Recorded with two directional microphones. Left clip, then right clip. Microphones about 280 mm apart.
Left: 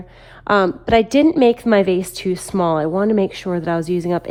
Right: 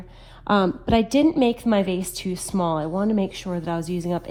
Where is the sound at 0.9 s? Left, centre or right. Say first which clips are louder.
Left 6 dB; left.